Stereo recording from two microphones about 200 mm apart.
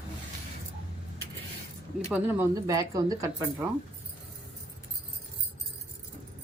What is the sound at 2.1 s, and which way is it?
Speech, 15° right (ahead or behind).